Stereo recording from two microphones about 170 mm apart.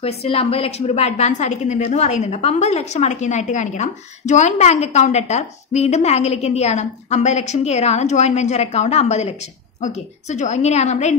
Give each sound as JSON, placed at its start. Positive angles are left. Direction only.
{"t": 0.0, "sound": "a woman's voice", "side_deg": 35}